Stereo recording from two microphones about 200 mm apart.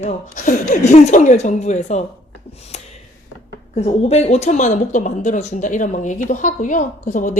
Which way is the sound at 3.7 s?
30° left (ahead or behind).